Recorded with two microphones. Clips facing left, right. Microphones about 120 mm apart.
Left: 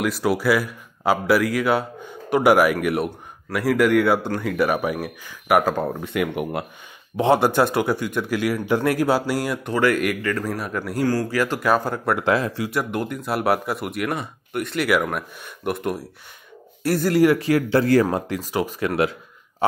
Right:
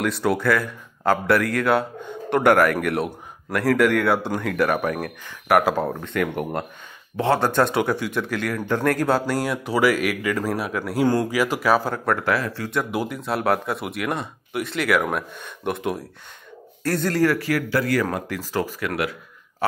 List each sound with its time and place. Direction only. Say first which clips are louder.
0.0 s speech: left 1 dB; 5° left (ahead or behind)
11.1 s speech: right 2 dB; 20° right (ahead or behind)
11.3 s speech: even; 5° right (ahead or behind)
12.2 s a man's voice: left 3 dB; 20° left (ahead or behind)
12.9 s a man's voice: even; 5° right (ahead or behind); by 18.8 s 15° left (ahead or behind)
18.8 s a man's voice: left 4 dB; 25° left (ahead or behind)